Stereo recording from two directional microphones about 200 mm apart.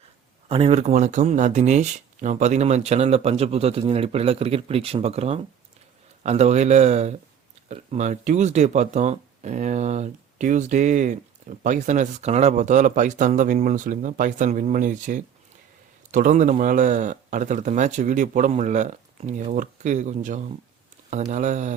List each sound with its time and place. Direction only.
0.4 s speech: 30° right (ahead or behind)